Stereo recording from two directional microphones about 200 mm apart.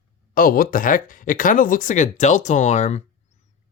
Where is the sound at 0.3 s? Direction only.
45° left (ahead or behind).